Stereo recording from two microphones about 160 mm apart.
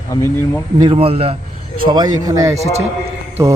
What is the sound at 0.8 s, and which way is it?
Speech, 35° right (ahead or behind).